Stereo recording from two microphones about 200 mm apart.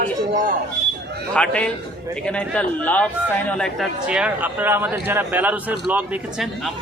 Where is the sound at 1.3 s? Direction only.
5° left (ahead or behind).